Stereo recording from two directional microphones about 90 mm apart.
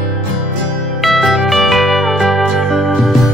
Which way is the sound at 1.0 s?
Centre (ahead or behind).